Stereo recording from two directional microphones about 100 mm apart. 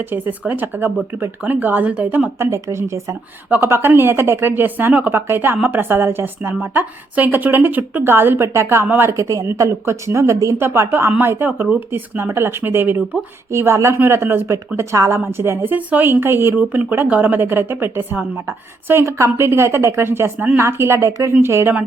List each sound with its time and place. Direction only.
0.0 s a woman's voice: 20° right (ahead or behind)